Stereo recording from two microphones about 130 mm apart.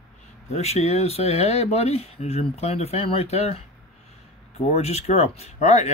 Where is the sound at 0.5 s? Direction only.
55° left (ahead or behind).